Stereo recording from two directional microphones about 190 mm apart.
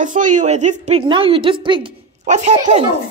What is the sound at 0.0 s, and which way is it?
A woman's voice, 40° right (ahead or behind).